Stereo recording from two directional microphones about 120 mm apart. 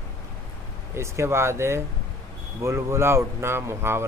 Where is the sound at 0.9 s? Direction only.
20° right (ahead or behind).